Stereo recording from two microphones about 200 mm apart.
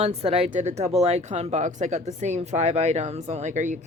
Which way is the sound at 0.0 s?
30° right (ahead or behind).